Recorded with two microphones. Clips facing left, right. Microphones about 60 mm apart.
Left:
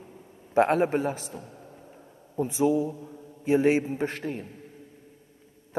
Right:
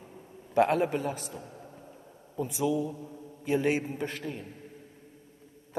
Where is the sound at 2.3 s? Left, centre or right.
Left.